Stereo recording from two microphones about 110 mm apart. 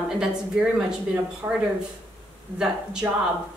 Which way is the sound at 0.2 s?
5° right (ahead or behind).